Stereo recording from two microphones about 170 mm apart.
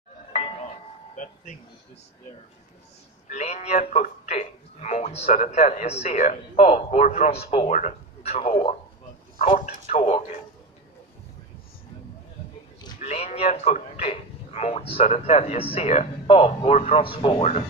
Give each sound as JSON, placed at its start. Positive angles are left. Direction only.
{"t": 0.3, "sound": "music", "side_deg": 40}
{"t": 1.1, "sound": "speech", "side_deg": 50}
{"t": 3.3, "sound": "a man's voice", "side_deg": 40}
{"t": 13.0, "sound": "a man's voice", "side_deg": 40}